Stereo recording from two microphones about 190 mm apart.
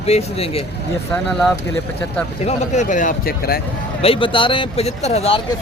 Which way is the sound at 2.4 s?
40° left (ahead or behind).